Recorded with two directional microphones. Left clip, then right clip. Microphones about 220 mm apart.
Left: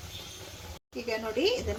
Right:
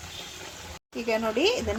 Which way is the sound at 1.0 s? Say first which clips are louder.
Right 5 dB; 25° right (ahead or behind).